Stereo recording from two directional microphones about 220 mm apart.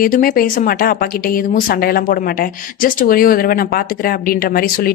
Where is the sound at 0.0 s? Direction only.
40° left (ahead or behind).